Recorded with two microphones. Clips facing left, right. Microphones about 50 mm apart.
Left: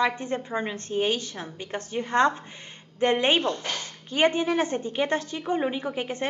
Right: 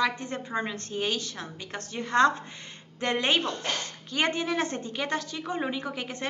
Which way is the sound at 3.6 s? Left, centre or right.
Right.